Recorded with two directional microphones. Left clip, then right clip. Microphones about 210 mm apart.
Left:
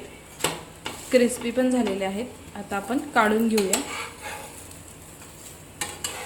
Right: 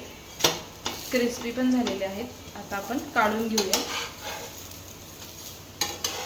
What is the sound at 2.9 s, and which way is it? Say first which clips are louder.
Speech: left 5 dB; 55° left (ahead or behind).